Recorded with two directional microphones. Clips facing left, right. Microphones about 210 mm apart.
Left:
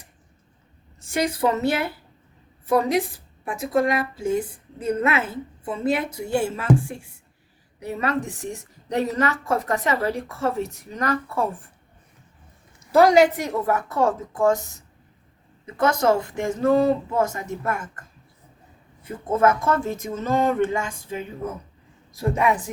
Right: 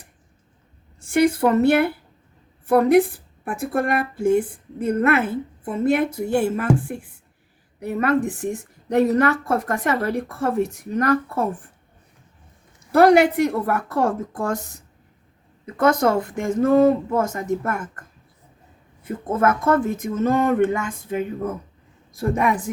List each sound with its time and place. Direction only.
1.5 s a woman's voice: 60° right (ahead or behind)
12.9 s a woman's voice: 60° right (ahead or behind)
15.6 s a woman's voice: 55° right (ahead or behind)
19.0 s a woman's voice: 55° right (ahead or behind)